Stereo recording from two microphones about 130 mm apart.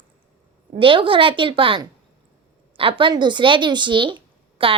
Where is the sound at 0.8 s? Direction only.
40° right (ahead or behind).